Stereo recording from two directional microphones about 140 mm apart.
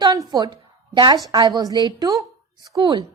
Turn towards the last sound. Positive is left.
turn(degrees=-30)  # may be behind; listen again after turning